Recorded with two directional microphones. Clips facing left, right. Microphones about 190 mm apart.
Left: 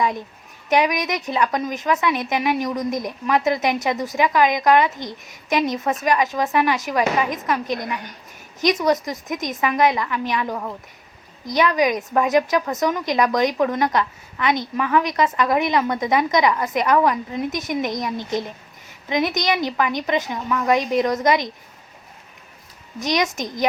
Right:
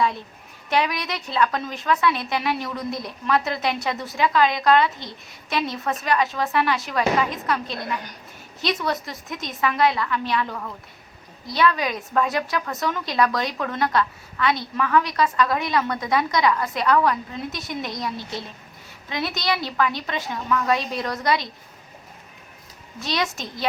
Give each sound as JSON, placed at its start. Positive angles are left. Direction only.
{"t": 0.7, "sound": "a woman's voice", "side_deg": 20}
{"t": 23.0, "sound": "a woman's voice", "side_deg": 20}